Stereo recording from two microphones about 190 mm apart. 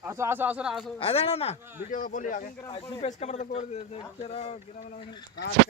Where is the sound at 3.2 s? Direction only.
35° left (ahead or behind).